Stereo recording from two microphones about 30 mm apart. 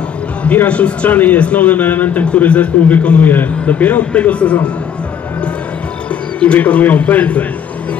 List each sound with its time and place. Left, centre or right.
0.7 s a man's voice: left
1.1 s a man's voice: left
1.4 s speech: left
2.2 s a man's voice: left
3.2 s a man's voice: left
3.6 s speech: left
4.1 s a man's voice: left
6.6 s a man's voice: left
7.1 s speech: left